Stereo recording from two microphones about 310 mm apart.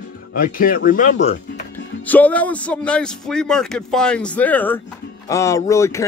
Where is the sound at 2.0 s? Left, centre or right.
Centre.